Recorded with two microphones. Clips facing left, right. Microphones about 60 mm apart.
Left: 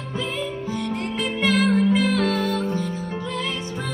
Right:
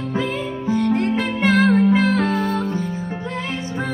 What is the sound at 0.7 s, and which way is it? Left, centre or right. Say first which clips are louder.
Music: right 8 dB; right.